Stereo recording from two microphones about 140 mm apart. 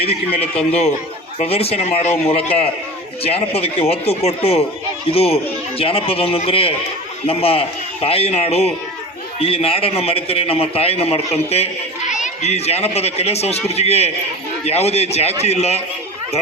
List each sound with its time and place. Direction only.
0.1 s a man's voice: 45° left (ahead or behind)